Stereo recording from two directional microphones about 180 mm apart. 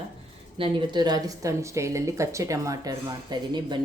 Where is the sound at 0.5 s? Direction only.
25° right (ahead or behind).